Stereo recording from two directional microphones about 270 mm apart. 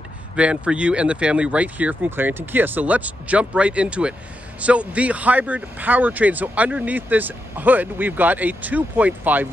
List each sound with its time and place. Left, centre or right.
0.4 s a man's voice: centre